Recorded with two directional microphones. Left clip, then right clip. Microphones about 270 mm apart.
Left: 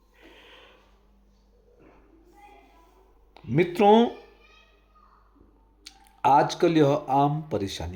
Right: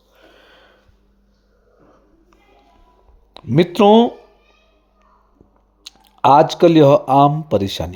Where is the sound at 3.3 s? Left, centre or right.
Right.